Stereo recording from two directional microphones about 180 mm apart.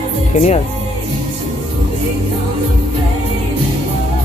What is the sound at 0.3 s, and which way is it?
Speech, 40° left (ahead or behind).